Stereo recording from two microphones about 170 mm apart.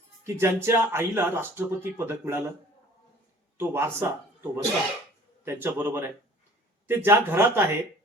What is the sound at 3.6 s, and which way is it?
Speech, 15° right (ahead or behind).